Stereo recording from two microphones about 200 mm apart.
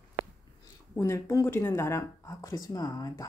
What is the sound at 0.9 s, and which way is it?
Speech, 15° left (ahead or behind).